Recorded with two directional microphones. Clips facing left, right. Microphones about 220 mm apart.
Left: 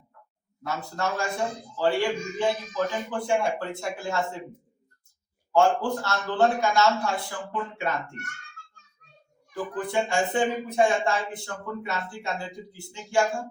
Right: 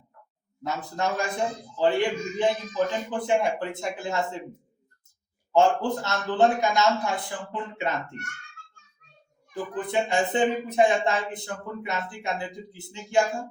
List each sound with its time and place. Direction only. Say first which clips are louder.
0.6 s a man's voice: right 1 dB; 20° right (ahead or behind)
5.5 s a man's voice: right 1 dB; 20° right (ahead or behind)
9.7 s a man's voice: right 1 dB; 20° right (ahead or behind)